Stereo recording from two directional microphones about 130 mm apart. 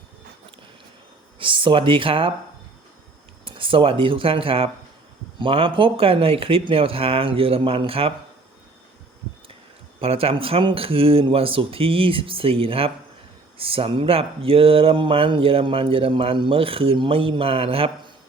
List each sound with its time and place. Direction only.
1.4 s speech: 40° right (ahead or behind)
3.4 s speech: 40° right (ahead or behind)
10.0 s speech: 50° right (ahead or behind)